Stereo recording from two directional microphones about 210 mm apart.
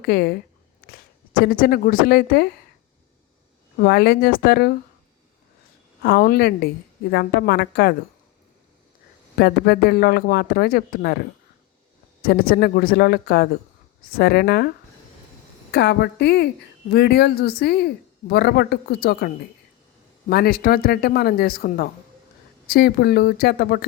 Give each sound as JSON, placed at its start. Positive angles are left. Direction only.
{"t": 0.0, "sound": "speech", "side_deg": 45}
{"t": 3.8, "sound": "speech", "side_deg": 45}
{"t": 6.0, "sound": "speech", "side_deg": 50}
{"t": 9.4, "sound": "speech", "side_deg": 50}
{"t": 12.2, "sound": "speech", "side_deg": 45}
{"t": 15.7, "sound": "speech", "side_deg": 55}